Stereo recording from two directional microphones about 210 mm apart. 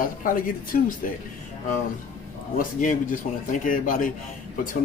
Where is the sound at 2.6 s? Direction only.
40° left (ahead or behind).